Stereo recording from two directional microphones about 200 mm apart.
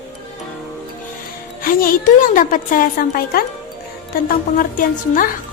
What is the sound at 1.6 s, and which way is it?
A woman's voice, 45° left (ahead or behind).